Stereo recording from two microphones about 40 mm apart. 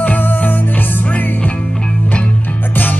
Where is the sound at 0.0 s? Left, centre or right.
Left.